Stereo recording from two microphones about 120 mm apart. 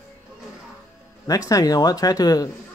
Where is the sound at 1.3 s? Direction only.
30° left (ahead or behind).